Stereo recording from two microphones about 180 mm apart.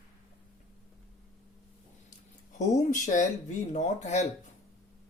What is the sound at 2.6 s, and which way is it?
Speech, 45° left (ahead or behind).